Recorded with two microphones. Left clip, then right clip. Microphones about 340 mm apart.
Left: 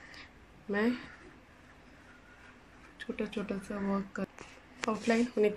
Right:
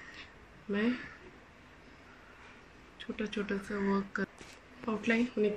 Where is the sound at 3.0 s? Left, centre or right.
Centre.